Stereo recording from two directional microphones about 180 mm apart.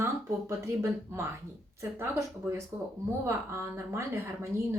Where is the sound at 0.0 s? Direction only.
15° right (ahead or behind).